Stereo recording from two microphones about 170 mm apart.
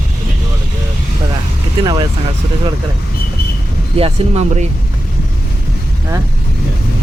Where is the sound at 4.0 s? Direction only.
35° right (ahead or behind).